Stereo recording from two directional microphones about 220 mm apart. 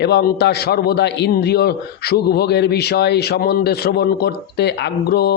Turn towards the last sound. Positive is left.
turn(degrees=45)  # may be behind; listen again after turning